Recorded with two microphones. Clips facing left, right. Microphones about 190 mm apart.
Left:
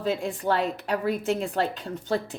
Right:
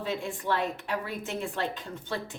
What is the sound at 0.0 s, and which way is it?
A woman's voice, 40° left (ahead or behind).